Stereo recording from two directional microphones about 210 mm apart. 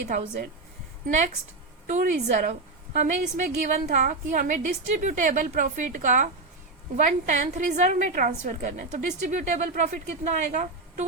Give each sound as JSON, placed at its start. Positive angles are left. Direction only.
{"t": 1.0, "sound": "a woman's voice", "side_deg": -35}